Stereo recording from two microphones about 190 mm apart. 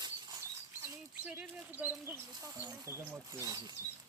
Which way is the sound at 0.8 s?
15° right (ahead or behind).